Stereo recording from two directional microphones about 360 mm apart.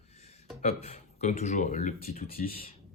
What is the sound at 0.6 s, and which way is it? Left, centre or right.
Speech, centre.